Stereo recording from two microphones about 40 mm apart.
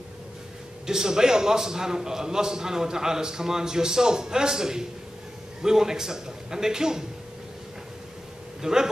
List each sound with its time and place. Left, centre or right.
0.8 s a man's voice: centre
8.6 s speech: centre